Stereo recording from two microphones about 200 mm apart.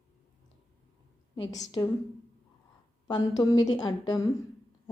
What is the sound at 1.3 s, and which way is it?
Speech, 20° left (ahead or behind).